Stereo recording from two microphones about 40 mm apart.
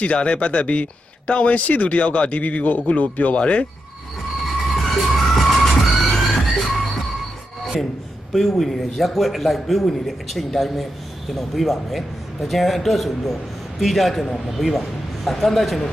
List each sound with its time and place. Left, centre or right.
0.0 s speech: left
2.4 s speech: left
4.7 s emergency vehicle: centre
7.6 s a sound: centre
8.3 s a man's voice: centre